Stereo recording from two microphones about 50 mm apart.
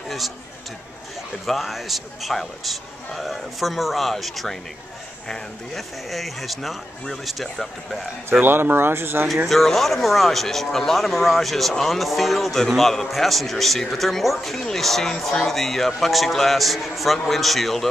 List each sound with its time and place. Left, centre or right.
1.4 s a man's voice: centre
8.3 s speech: right
9.5 s a man's voice: centre